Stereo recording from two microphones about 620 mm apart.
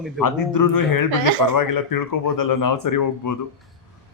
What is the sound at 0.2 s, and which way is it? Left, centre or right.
Speech, left.